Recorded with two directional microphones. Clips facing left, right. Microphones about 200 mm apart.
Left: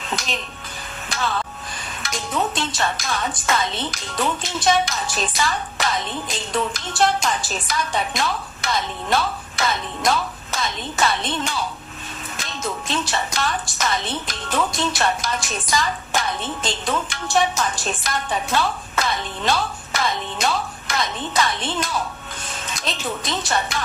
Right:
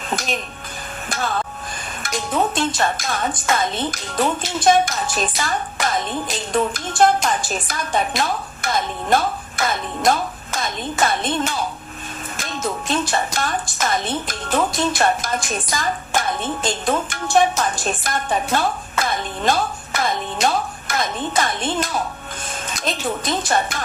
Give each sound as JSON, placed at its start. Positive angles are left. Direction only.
{"t": 0.1, "sound": "speech", "side_deg": -50}
{"t": 1.1, "sound": "a sound", "side_deg": -50}
{"t": 2.0, "sound": "speech", "side_deg": -50}